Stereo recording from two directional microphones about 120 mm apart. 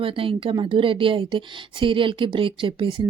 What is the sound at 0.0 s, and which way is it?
A woman's voice, 50° right (ahead or behind).